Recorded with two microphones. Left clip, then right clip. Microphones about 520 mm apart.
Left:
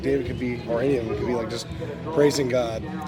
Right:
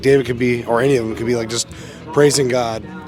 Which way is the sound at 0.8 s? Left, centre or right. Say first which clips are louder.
Right 7 dB; right.